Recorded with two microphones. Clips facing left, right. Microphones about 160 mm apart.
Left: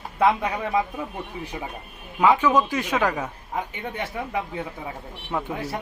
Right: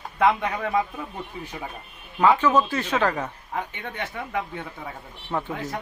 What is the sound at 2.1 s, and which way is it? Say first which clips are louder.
A man's voice: even; 10° left (ahead or behind).